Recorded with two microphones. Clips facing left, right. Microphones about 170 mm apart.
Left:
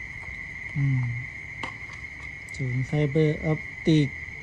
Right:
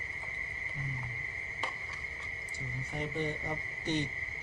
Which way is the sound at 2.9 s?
70° left (ahead or behind).